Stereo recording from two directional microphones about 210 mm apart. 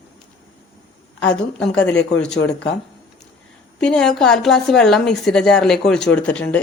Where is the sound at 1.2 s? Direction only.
5° left (ahead or behind).